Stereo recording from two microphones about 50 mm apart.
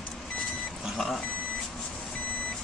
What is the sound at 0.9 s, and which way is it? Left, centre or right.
Vehicle, centre.